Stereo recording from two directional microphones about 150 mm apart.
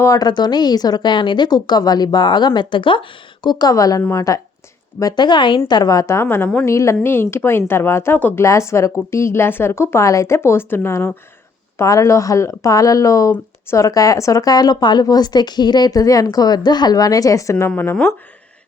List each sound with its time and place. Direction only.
0.0 s a woman's voice: 25° left (ahead or behind)
17.7 s a woman's voice: 10° left (ahead or behind)